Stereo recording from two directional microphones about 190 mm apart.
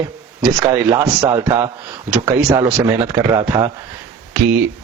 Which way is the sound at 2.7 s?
15° right (ahead or behind).